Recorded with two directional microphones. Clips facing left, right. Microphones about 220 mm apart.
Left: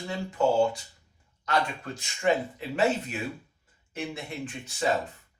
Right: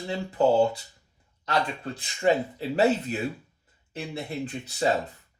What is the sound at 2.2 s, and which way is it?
Speech, 35° right (ahead or behind).